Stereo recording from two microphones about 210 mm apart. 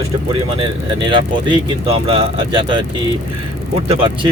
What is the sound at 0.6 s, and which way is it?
Mantra, 25° right (ahead or behind).